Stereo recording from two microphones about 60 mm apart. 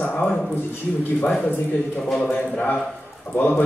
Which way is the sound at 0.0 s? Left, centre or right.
Centre.